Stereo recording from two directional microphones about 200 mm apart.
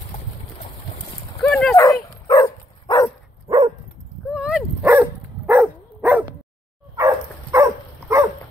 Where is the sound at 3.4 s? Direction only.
20° right (ahead or behind).